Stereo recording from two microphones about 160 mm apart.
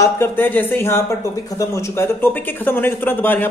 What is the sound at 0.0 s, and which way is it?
Speech, 15° left (ahead or behind).